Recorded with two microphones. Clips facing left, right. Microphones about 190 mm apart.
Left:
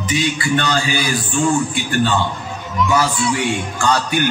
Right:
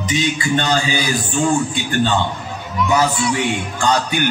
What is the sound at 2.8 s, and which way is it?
Music, 20° right (ahead or behind).